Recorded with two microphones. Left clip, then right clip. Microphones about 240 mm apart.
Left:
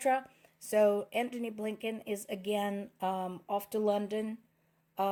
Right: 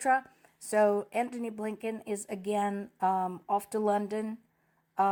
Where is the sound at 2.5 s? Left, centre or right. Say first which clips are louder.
Right 3 dB; right.